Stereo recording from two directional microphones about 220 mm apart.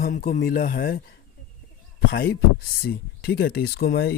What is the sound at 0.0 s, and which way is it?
Speech, 40° left (ahead or behind).